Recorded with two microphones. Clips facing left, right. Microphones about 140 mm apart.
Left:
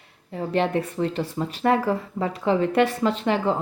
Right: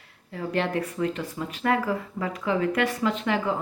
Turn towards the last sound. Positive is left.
turn(degrees=30)  # may be behind; listen again after turning